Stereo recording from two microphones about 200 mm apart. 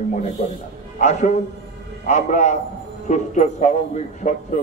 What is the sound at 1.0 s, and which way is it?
A man's voice, 35° left (ahead or behind).